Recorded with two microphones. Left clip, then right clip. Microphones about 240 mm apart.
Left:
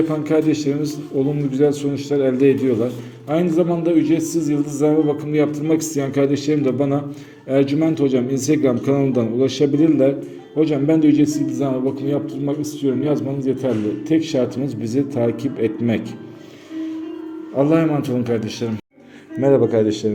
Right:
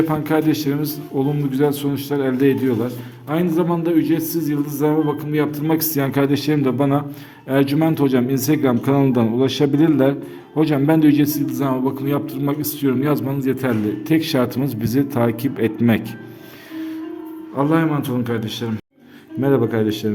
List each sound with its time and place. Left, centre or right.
0.1 s a man's voice: centre
17.6 s a man's voice: centre
19.4 s a man's voice: centre